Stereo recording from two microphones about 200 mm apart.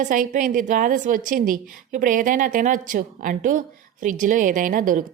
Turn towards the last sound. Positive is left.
turn(degrees=-45)  # may be behind; listen again after turning